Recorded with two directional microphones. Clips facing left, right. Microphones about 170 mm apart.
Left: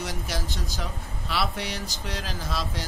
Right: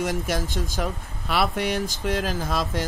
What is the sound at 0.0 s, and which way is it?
Speech, 50° right (ahead or behind).